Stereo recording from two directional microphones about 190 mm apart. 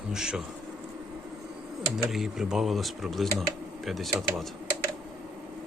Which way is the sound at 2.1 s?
Centre (ahead or behind).